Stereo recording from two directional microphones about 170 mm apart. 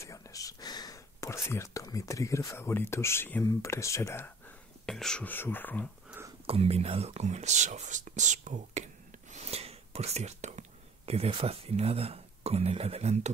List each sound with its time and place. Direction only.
0.0 s speech: 20° left (ahead or behind)
4.8 s speech: 5° left (ahead or behind)
6.4 s speech: 35° right (ahead or behind)